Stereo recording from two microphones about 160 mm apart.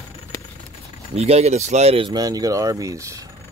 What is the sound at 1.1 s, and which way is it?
Speech, 40° right (ahead or behind).